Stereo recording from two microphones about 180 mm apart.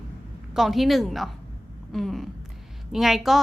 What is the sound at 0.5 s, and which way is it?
A woman's voice, centre (ahead or behind).